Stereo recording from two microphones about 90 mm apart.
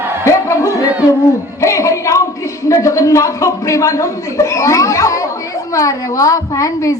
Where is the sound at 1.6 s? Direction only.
35° left (ahead or behind).